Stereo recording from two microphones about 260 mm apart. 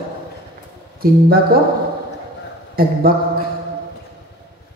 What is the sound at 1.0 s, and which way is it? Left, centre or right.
Speech, right.